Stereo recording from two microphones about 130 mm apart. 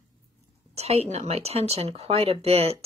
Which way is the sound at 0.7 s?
55° right (ahead or behind).